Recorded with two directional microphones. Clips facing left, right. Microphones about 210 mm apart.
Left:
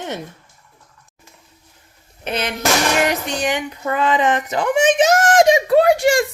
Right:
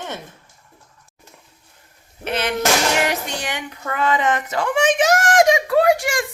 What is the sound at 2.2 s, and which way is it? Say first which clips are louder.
Speech: even; 20° left (ahead or behind).